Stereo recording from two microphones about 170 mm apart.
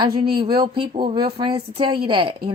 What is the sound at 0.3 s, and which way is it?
A woman's voice, 25° right (ahead or behind).